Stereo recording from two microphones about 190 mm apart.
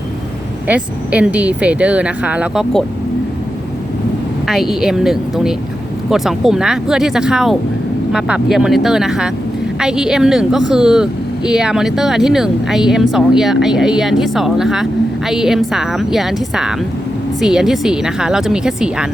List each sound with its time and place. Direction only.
0.7 s speech: 10° right (ahead or behind)
4.4 s speech: centre (ahead or behind)